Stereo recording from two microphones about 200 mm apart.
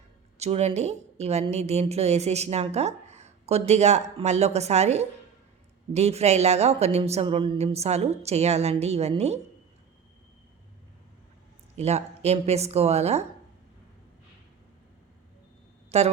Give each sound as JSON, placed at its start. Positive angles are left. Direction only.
{"t": 0.3, "sound": "a woman's voice", "side_deg": -35}
{"t": 11.8, "sound": "a woman's voice", "side_deg": -30}
{"t": 15.9, "sound": "a woman's voice", "side_deg": -30}